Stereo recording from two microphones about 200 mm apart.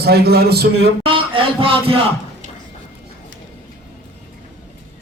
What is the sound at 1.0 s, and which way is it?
Speech, 25° right (ahead or behind).